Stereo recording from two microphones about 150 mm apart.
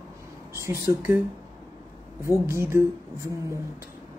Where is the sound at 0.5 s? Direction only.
20° right (ahead or behind).